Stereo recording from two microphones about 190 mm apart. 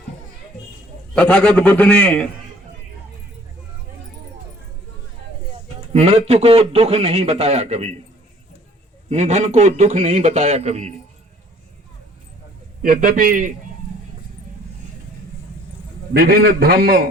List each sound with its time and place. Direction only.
1.1 s a man's voice: 5° left (ahead or behind)
5.9 s a man's voice: 35° right (ahead or behind)
9.0 s a man's voice: 35° right (ahead or behind)
12.8 s a man's voice: 45° right (ahead or behind)
16.1 s a man's voice: 55° right (ahead or behind)